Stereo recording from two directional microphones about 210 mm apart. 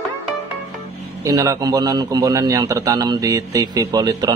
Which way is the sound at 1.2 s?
15° right (ahead or behind).